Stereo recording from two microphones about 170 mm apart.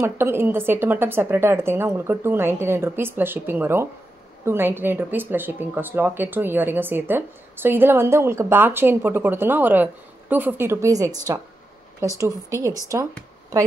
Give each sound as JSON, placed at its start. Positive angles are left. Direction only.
{"t": 0.0, "sound": "speech", "side_deg": -15}